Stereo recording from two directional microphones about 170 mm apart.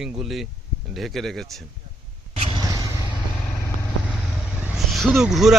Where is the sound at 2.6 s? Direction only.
20° right (ahead or behind).